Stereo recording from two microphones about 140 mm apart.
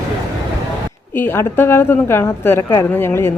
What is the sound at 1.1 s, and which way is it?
A woman's voice, 15° left (ahead or behind).